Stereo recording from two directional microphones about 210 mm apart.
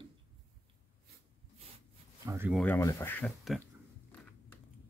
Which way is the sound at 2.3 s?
10° right (ahead or behind).